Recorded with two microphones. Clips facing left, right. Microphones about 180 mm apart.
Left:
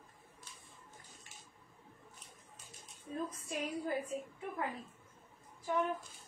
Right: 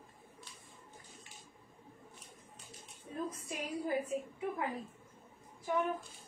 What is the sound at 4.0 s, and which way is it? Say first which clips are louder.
Speech: right 4 dB; 10° right (ahead or behind).